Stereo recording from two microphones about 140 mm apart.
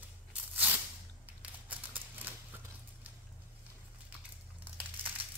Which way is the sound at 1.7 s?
10° right (ahead or behind).